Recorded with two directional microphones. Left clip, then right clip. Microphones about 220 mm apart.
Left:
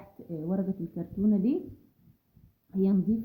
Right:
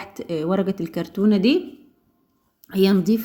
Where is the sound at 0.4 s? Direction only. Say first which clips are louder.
Right 10 dB; 20° right (ahead or behind).